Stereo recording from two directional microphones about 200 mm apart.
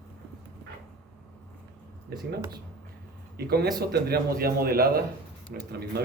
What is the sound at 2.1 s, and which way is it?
Speech, 55° right (ahead or behind).